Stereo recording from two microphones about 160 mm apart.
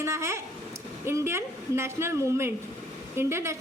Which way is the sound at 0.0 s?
15° right (ahead or behind).